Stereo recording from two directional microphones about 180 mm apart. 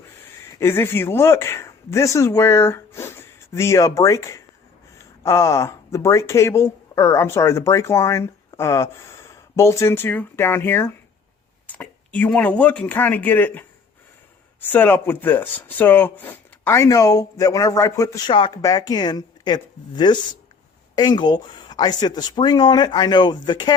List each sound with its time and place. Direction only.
0.6 s speech: 15° left (ahead or behind)
18.3 s speech: 25° left (ahead or behind)